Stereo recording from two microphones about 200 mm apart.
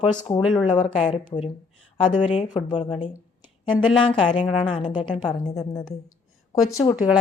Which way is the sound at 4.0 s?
25° left (ahead or behind).